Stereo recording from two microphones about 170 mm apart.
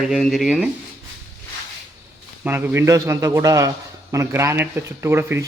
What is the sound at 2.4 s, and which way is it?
A man's voice, 10° right (ahead or behind).